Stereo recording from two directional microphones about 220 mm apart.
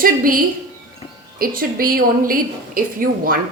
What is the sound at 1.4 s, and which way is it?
A woman's voice, 40° right (ahead or behind).